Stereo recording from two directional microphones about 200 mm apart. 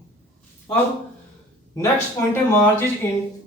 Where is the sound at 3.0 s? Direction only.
10° left (ahead or behind).